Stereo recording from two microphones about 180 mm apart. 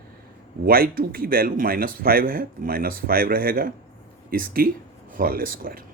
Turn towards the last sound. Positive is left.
turn(degrees=-50)  # may be behind; listen again after turning